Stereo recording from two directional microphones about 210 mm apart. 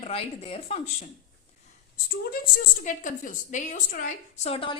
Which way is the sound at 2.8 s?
35° left (ahead or behind).